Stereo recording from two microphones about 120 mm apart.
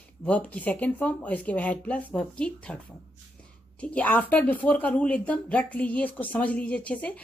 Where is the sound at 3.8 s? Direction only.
10° left (ahead or behind).